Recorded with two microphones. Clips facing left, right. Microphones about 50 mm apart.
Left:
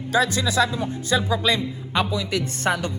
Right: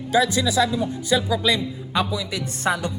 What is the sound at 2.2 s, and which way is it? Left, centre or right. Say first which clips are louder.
Speech: left 2 dB; left.